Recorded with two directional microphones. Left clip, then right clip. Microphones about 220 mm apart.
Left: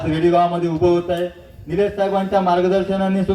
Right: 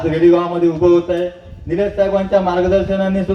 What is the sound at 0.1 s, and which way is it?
Speech, 40° left (ahead or behind).